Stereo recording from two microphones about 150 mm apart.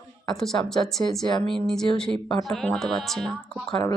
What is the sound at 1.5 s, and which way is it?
Speech, 5° left (ahead or behind).